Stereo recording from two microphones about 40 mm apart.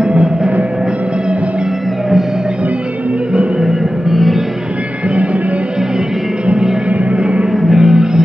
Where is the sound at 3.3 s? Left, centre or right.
Right.